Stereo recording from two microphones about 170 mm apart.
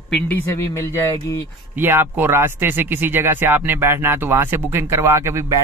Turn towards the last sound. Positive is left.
turn(degrees=-15)  # may be behind; listen again after turning